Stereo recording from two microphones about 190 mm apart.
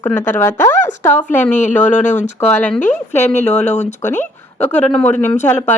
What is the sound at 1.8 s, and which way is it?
Speech, 40° left (ahead or behind).